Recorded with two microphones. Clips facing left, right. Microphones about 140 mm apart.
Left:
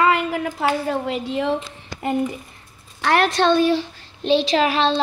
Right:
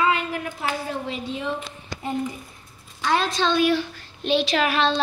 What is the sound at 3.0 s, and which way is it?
Speech, 75° left (ahead or behind).